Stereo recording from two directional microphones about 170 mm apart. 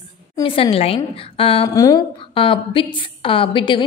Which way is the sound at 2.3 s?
30° left (ahead or behind).